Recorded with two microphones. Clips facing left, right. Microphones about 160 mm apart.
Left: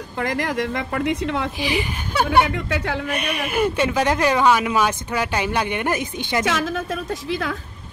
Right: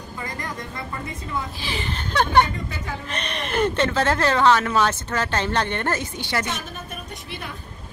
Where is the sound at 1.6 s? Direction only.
10° left (ahead or behind).